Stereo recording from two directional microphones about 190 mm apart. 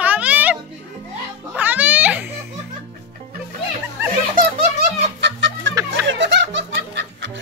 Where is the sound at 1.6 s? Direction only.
10° right (ahead or behind).